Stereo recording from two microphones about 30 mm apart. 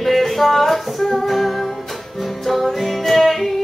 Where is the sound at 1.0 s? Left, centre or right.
Centre.